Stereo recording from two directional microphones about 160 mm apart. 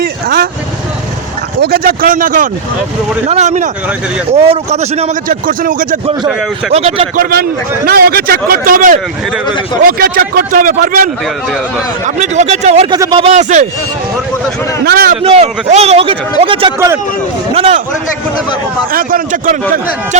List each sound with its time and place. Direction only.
0.0 s vehicle: 80° right
1.6 s speech: 70° right (ahead or behind); by 5.1 s 45° right (ahead or behind)
5.3 s speech: 60° right (ahead or behind)
6.7 s speech: 35° right (ahead or behind)
7.2 s speech: 75° right (ahead or behind); by 11.1 s 60° right (ahead or behind)
12.0 s speech: 50° right (ahead or behind)
12.9 s speech: 30° right (ahead or behind); by 13.7 s 50° right (ahead or behind)
14.8 s speech: 70° right (ahead or behind)
15.2 s speech: 40° right (ahead or behind)
18.9 s speech: 65° right (ahead or behind)